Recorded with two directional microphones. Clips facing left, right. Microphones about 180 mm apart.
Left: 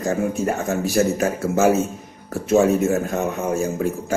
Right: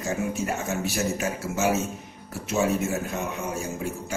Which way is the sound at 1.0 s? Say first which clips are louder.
Left 8 dB; 55° left (ahead or behind).